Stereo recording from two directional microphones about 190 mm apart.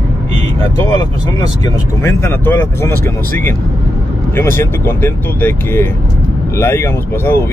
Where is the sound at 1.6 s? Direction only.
15° left (ahead or behind).